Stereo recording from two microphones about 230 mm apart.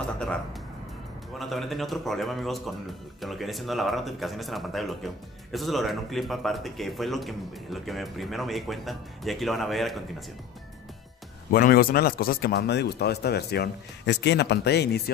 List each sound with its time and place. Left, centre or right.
1.4 s speech: centre
11.5 s a man's voice: left